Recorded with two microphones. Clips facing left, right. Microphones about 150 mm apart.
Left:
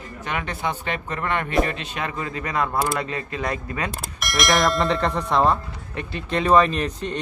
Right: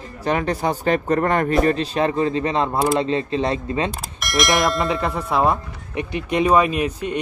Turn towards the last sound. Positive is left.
turn(degrees=-10)  # may be behind; listen again after turning